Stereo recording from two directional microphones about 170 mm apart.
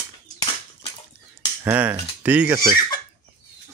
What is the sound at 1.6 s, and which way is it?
Speech, 10° right (ahead or behind).